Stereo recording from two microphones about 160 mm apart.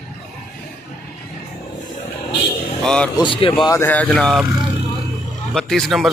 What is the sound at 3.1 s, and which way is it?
Speech, 30° left (ahead or behind).